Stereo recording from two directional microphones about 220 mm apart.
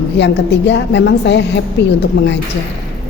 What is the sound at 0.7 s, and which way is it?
Speech, 55° left (ahead or behind).